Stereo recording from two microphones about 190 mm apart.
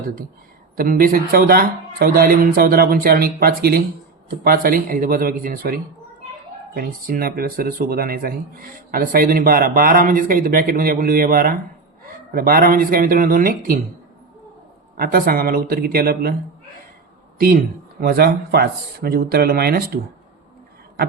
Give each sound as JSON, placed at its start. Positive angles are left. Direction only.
{"t": 0.8, "sound": "speech", "side_deg": -50}
{"t": 14.9, "sound": "speech", "side_deg": -50}
{"t": 18.0, "sound": "speech", "side_deg": -55}